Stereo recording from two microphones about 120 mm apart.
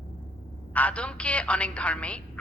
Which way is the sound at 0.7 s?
10° left (ahead or behind).